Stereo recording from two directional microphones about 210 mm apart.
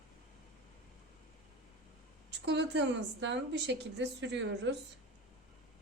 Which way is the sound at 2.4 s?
55° right (ahead or behind).